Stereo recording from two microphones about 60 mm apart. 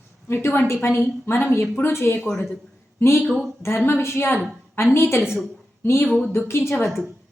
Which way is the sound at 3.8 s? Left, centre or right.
Left.